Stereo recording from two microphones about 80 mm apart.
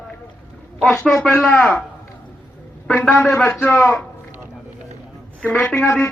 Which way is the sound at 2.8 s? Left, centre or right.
Centre.